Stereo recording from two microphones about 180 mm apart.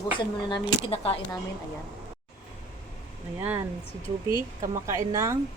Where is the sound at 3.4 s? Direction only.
15° right (ahead or behind).